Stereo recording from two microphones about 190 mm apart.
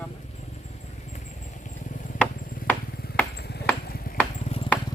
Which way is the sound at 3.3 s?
60° left (ahead or behind).